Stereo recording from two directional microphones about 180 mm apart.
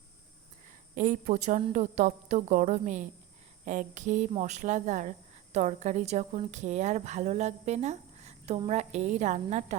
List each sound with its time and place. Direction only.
0.9 s a woman's voice: 45° right (ahead or behind)